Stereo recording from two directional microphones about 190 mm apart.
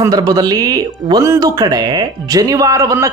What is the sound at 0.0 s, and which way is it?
Speech, 20° right (ahead or behind).